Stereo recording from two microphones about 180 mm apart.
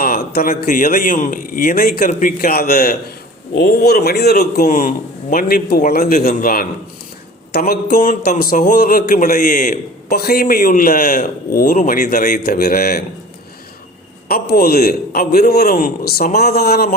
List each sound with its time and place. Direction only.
0.0 s a man's voice: 55° left (ahead or behind)
14.3 s a man's voice: 55° left (ahead or behind)